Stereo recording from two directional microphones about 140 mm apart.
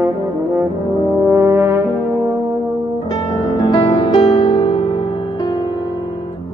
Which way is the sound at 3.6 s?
45° left (ahead or behind).